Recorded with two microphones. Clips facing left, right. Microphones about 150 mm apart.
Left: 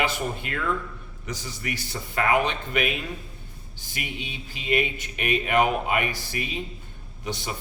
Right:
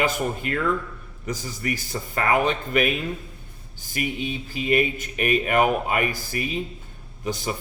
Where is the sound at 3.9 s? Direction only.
45° right (ahead or behind).